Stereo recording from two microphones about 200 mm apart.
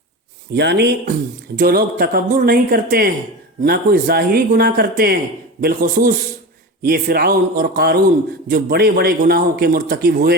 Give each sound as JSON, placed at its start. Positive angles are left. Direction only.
{"t": 0.5, "sound": "a man's voice", "side_deg": -60}